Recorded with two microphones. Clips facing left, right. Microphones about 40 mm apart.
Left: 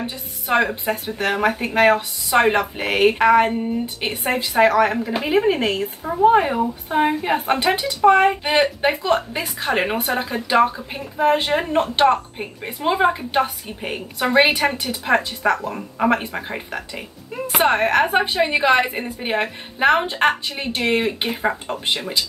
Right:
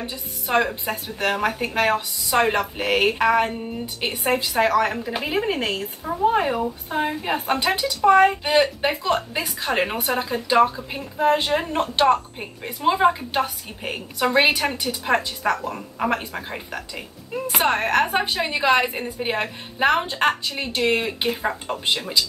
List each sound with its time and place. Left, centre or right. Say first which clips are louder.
0.0 s a woman's voice: left 2 dB; left
4.5 s a woman's voice: left 6 dB; centre